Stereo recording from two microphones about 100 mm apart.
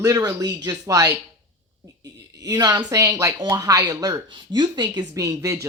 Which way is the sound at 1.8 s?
40° right (ahead or behind).